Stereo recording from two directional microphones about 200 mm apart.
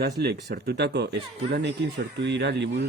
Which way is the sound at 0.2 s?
55° right (ahead or behind).